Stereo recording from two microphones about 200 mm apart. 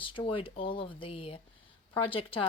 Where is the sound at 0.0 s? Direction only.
25° left (ahead or behind).